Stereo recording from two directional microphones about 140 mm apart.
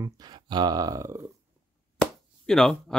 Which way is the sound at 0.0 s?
30° right (ahead or behind).